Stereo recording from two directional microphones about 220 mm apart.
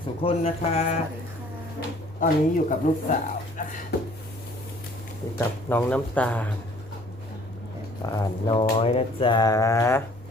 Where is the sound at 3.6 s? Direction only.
35° left (ahead or behind).